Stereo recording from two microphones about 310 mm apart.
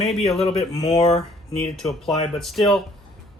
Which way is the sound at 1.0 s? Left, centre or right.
Centre.